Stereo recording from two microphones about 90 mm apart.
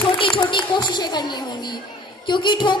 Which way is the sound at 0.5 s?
55° left (ahead or behind).